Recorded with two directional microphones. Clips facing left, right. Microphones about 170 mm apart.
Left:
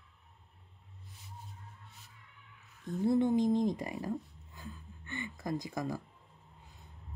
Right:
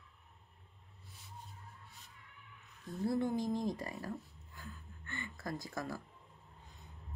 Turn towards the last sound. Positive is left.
turn(degrees=15)  # may be behind; listen again after turning